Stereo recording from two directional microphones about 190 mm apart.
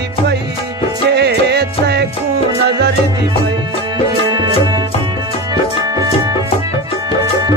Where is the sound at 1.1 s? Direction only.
60° right (ahead or behind).